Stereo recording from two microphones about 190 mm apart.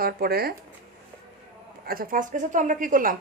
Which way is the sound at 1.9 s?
50° right (ahead or behind).